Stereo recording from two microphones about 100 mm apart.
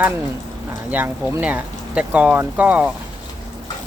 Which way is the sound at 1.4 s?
15° right (ahead or behind).